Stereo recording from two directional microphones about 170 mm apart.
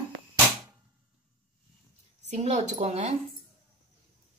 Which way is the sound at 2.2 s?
40° right (ahead or behind).